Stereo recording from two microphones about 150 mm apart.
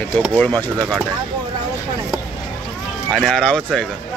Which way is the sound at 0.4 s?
10° left (ahead or behind).